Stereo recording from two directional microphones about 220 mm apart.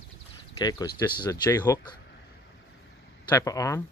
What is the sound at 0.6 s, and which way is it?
Speech, 20° left (ahead or behind).